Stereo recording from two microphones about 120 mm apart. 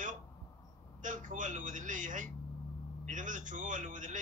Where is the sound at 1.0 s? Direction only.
90° right.